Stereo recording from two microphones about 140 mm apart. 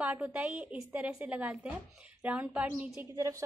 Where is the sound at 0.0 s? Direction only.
10° right (ahead or behind).